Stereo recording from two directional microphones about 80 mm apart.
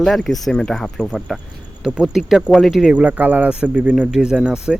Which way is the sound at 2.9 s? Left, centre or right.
Centre.